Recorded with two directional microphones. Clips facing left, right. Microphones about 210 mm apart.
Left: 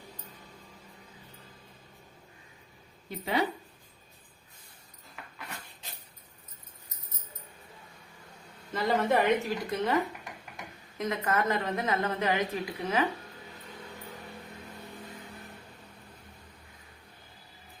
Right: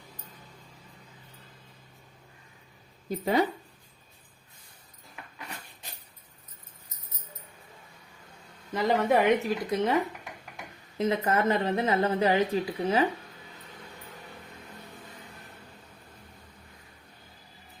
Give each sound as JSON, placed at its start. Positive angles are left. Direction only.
{"t": 3.1, "sound": "speech", "side_deg": -45}
{"t": 8.7, "sound": "a woman's voice", "side_deg": -15}
{"t": 10.9, "sound": "a woman's voice", "side_deg": -30}